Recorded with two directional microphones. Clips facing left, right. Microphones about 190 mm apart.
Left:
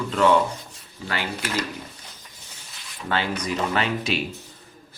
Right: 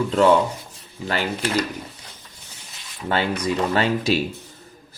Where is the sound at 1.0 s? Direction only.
40° right (ahead or behind).